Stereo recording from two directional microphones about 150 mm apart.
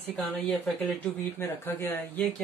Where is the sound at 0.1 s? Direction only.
5° left (ahead or behind).